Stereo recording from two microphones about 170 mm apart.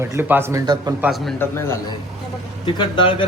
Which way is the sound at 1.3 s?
15° left (ahead or behind).